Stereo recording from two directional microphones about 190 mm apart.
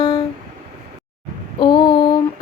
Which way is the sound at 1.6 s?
25° left (ahead or behind).